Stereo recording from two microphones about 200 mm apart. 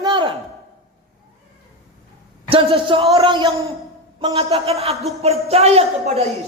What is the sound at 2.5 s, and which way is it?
Speech, 25° right (ahead or behind).